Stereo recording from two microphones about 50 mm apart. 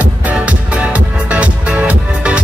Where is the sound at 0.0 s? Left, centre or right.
Right.